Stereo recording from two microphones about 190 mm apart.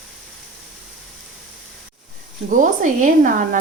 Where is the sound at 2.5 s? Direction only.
45° right (ahead or behind).